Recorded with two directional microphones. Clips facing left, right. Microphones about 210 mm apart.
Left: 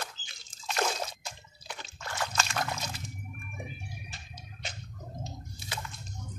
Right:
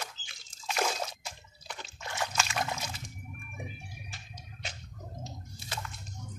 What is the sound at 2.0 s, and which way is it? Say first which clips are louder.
Dog: even; 20° right (ahead or behind).